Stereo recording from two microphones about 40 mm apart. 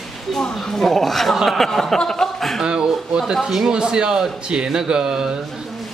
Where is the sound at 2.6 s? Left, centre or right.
Centre.